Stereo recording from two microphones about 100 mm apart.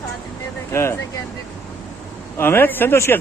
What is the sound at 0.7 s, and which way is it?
Speech, 25° left (ahead or behind).